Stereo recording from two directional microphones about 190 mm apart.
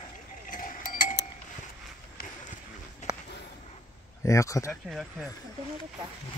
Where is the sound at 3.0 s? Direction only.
35° left (ahead or behind).